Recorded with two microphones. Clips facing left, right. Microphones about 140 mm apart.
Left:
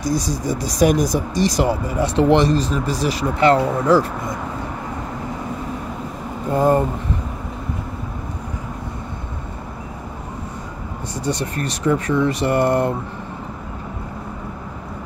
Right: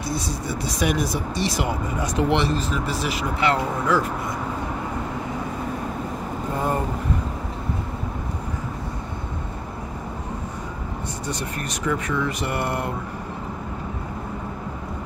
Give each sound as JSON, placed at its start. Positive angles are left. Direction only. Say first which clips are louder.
{"t": 0.1, "sound": "speech", "louder": "left 5 dB", "side_deg": 40}
{"t": 11.2, "sound": "speech", "louder": "left 8 dB", "side_deg": 35}